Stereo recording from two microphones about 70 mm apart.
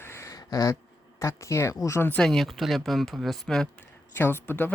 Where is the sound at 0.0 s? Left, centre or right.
Left.